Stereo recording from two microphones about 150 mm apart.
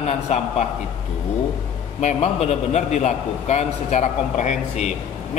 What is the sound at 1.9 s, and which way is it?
A man's voice, 45° left (ahead or behind).